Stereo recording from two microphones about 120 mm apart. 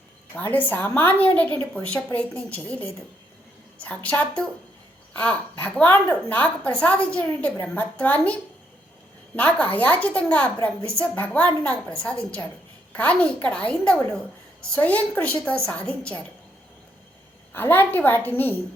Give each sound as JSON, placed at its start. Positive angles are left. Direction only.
{"t": 0.3, "sound": "speech", "side_deg": 15}
{"t": 17.5, "sound": "speech", "side_deg": 20}